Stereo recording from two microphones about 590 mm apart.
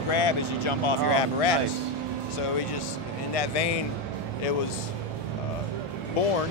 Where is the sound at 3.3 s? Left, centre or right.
Left.